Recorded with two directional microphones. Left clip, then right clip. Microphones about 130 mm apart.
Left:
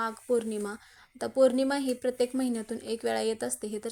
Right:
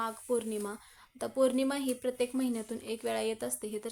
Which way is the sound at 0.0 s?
25° left (ahead or behind).